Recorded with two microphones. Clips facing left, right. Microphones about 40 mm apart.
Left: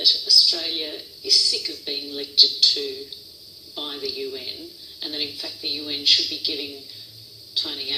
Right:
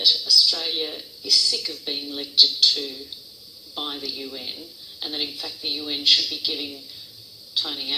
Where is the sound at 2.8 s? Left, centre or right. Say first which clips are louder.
Left 2 dB; centre.